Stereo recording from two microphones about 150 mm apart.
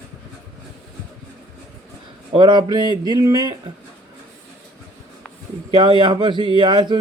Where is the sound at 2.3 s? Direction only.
30° right (ahead or behind).